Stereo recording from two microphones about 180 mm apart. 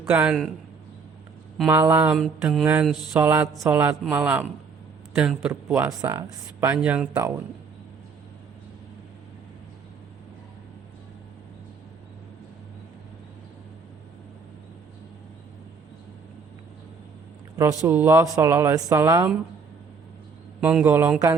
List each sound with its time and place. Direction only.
0.0 s a man's voice: 10° right (ahead or behind)
1.6 s speech: 10° right (ahead or behind)
2.1 s mantra: centre (ahead or behind)
3.1 s speech: 10° right (ahead or behind)
17.6 s speech: 15° right (ahead or behind)
20.6 s speech: 10° right (ahead or behind)